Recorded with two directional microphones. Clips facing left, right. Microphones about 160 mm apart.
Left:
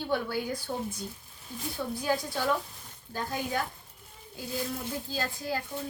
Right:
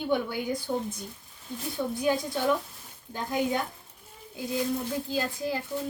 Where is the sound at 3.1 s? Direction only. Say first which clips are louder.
Right 5 dB; 20° right (ahead or behind).